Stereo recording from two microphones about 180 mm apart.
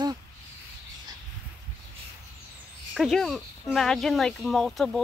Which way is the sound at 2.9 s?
Centre (ahead or behind).